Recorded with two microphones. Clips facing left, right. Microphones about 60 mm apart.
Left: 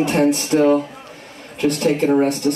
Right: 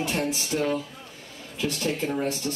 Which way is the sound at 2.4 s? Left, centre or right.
Left.